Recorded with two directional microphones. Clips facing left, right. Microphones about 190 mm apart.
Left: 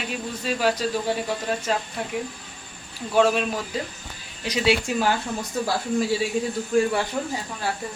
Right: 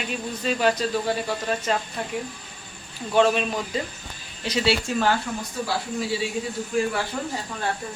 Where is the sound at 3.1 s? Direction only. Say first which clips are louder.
Even; 5° left (ahead or behind).